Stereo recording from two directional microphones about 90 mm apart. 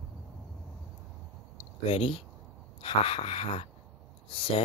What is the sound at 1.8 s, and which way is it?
Speech, 90° left.